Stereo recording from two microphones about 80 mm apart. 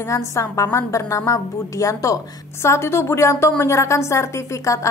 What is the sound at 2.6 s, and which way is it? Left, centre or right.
A woman's voice, left.